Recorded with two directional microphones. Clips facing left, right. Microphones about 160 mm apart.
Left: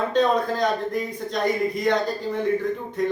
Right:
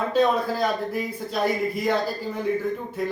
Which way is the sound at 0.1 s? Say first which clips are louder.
Right 1 dB; 5° right (ahead or behind).